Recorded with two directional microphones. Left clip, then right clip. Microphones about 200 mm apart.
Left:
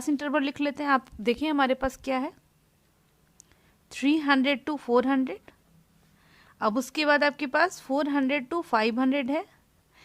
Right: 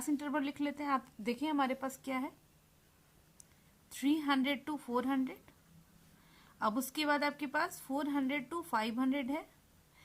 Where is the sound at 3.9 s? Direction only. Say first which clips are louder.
Left 9 dB; 45° left (ahead or behind).